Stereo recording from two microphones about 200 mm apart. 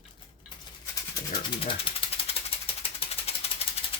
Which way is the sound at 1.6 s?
30° left (ahead or behind).